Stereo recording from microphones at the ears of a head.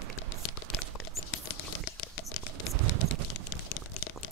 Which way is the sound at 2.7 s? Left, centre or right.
Right.